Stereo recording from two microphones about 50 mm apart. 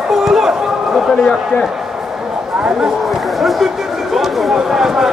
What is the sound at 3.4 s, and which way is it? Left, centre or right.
Speech, centre.